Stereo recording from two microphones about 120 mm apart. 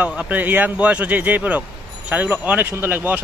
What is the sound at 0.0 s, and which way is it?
Speech, 10° right (ahead or behind).